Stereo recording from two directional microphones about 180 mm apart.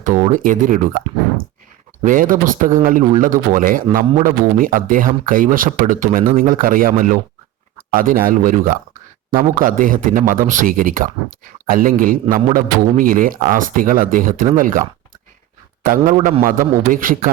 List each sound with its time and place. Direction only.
0.0 s speech: 50° right (ahead or behind)
2.0 s a man's voice: 50° right (ahead or behind)